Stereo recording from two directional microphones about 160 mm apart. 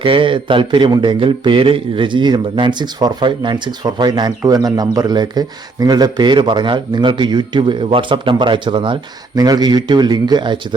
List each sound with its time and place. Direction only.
0.0 s speech: 35° right (ahead or behind)